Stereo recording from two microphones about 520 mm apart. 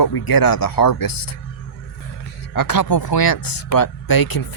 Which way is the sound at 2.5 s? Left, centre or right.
Left.